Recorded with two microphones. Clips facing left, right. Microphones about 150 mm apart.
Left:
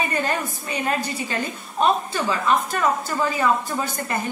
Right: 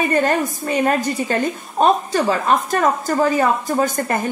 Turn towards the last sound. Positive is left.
turn(degrees=-45)  # may be behind; listen again after turning